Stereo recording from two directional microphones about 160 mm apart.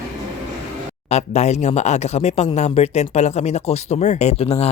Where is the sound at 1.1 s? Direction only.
45° left (ahead or behind).